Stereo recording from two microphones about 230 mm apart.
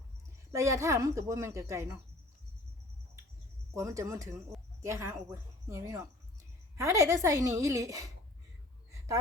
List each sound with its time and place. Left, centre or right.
0.5 s a woman's voice: centre
3.8 s a woman's voice: centre